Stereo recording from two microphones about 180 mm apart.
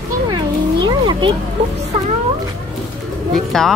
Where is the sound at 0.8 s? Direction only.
25° right (ahead or behind).